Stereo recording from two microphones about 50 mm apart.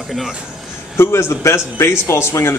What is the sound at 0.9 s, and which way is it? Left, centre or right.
Speech, left.